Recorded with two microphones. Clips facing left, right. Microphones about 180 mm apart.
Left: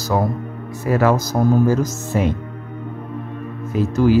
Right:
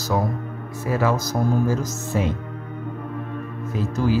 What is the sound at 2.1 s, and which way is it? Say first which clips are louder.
Speech: left 4 dB; 60° left (ahead or behind).